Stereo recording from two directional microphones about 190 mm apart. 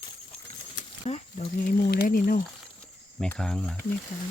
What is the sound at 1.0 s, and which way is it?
Speech, 30° left (ahead or behind).